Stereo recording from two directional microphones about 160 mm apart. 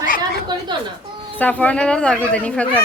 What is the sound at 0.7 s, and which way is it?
Speech, 30° right (ahead or behind).